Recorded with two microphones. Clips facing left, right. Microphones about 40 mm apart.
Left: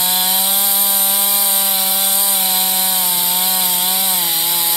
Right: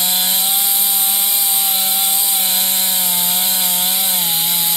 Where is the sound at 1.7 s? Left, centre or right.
Right.